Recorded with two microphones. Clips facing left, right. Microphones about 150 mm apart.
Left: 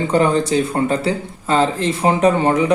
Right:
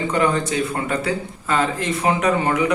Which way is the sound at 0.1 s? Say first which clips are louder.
Left 5 dB; 30° left (ahead or behind).